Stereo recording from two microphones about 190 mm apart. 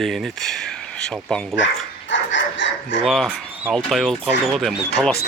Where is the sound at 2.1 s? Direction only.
75° left (ahead or behind).